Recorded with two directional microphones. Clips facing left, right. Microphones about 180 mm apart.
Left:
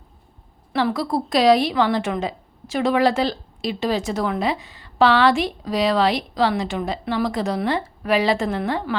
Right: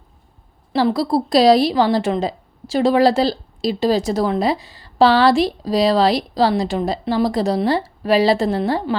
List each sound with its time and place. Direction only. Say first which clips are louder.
0.7 s a woman's voice: right 4 dB; 30° right (ahead or behind)